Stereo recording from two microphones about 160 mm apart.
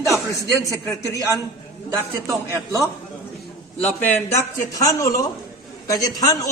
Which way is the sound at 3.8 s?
10° left (ahead or behind).